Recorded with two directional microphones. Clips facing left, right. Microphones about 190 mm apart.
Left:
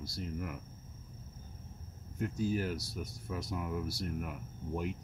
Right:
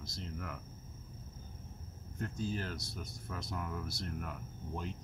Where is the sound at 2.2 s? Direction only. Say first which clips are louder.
Left 5 dB; 10° left (ahead or behind).